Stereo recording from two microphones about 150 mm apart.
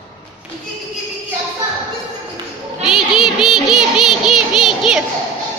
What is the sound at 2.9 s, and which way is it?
Child singing, centre (ahead or behind).